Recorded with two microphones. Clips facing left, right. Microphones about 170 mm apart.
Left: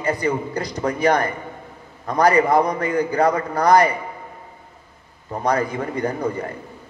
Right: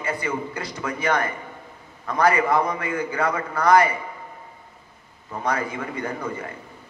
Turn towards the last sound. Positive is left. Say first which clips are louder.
# left 6 dB
turn(degrees=35)  # may be behind; listen again after turning